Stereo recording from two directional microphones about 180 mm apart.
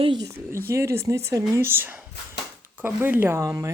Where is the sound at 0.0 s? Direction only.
25° right (ahead or behind).